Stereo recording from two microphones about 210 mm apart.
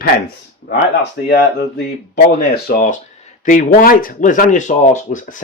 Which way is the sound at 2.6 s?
40° left (ahead or behind).